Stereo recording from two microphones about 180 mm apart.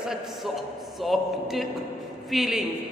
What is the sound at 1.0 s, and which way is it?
Speech, centre (ahead or behind).